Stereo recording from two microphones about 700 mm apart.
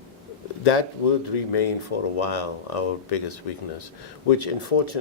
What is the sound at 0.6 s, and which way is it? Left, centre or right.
Speech, left.